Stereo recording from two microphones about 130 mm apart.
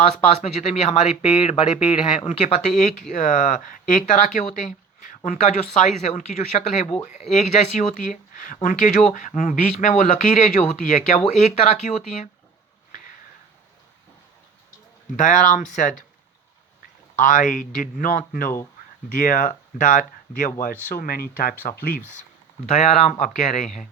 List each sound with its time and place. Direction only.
0.3 s speech: 60° left (ahead or behind)
2.6 s speech: 70° left (ahead or behind)
3.1 s speech: 85° left
8.6 s speech: 75° left (ahead or behind)
11.3 s speech: 60° left (ahead or behind)
15.1 s speech: 80° left
17.2 s speech: 90° left
22.6 s speech: 60° left (ahead or behind)